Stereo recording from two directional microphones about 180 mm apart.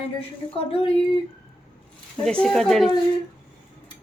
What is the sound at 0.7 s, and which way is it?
Speech, 30° left (ahead or behind).